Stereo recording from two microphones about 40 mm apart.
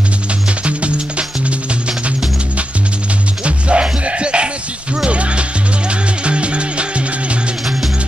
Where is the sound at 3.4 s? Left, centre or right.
Right.